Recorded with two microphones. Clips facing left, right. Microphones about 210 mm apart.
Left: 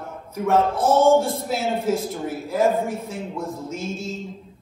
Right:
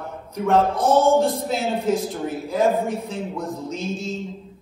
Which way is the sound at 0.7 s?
15° right (ahead or behind).